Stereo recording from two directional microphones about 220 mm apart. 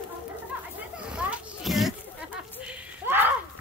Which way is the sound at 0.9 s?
5° right (ahead or behind).